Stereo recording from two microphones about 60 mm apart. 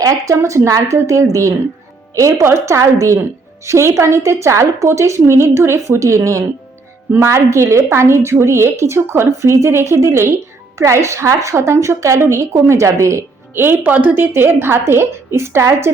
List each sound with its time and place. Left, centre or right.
0.0 s a woman's voice: right
13.5 s a woman's voice: right